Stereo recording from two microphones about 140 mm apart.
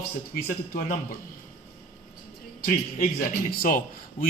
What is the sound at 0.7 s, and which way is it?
Speech, 70° left (ahead or behind).